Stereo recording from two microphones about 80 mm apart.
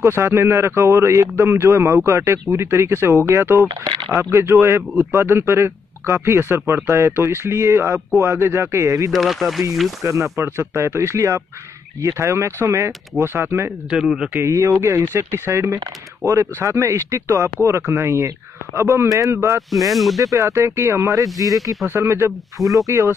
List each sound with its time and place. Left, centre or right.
0.0 s speech: right
3.6 s speech: right
4.2 s speech: right
9.1 s speech: centre
10.0 s speech: right
13.8 s speech: centre
14.4 s speech: right
19.7 s speech: centre
20.2 s speech: right
22.6 s speech: centre
22.8 s speech: right